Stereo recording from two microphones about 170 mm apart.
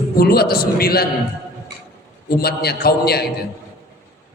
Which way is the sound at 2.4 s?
70° left (ahead or behind).